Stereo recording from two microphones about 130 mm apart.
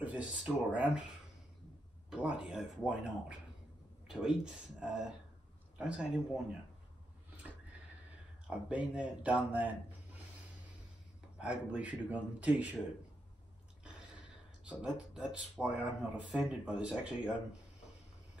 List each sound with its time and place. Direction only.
0.0 s speech: 10° right (ahead or behind)
2.0 s speech: 5° right (ahead or behind)
8.5 s speech: 10° right (ahead or behind)
11.3 s speech: 10° right (ahead or behind)
14.6 s speech: 10° right (ahead or behind)